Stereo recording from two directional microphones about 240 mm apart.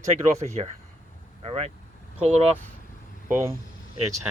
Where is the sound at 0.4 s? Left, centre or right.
Right.